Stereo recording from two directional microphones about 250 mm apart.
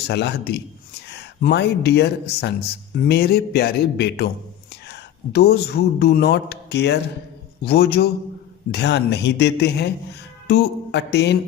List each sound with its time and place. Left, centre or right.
0.0 s a man's voice: left